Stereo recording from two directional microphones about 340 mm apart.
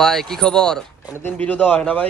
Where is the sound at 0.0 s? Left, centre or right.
Centre.